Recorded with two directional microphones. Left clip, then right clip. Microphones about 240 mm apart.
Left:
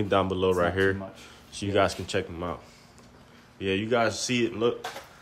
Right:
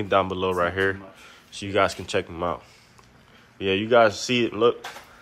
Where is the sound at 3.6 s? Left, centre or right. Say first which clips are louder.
Right 7 dB; centre.